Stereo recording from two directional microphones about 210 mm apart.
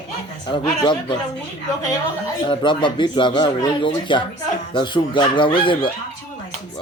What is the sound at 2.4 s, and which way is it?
A man's voice, 20° left (ahead or behind).